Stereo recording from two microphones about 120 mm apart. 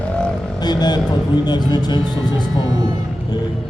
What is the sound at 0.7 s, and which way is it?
Vehicle, 35° left (ahead or behind).